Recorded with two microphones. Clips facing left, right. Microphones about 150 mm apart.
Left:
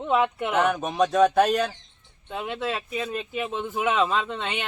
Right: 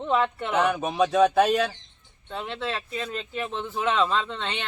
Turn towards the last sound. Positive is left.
turn(degrees=10)  # may be behind; listen again after turning